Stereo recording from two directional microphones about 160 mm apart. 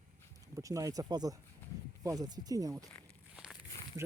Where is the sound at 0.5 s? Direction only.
20° right (ahead or behind).